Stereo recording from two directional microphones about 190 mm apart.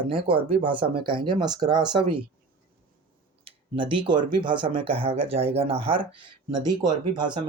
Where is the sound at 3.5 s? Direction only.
25° right (ahead or behind).